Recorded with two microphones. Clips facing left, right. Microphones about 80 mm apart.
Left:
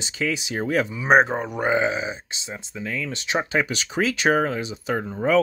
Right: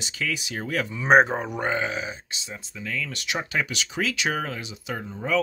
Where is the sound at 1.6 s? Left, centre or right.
Centre.